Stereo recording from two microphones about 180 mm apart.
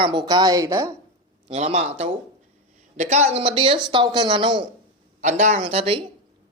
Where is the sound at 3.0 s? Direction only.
40° right (ahead or behind).